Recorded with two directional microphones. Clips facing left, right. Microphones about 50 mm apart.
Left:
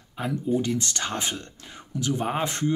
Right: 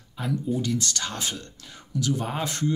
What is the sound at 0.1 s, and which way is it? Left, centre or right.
Speech, left.